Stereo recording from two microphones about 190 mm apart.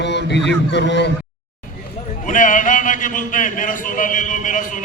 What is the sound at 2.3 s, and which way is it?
A man's voice, 45° left (ahead or behind).